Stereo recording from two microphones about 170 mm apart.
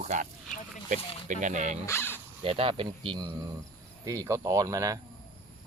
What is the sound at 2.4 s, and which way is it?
Speech, 35° right (ahead or behind).